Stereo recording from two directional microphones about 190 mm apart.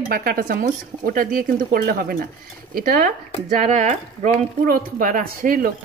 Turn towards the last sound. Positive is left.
turn(degrees=-50)  # may be behind; listen again after turning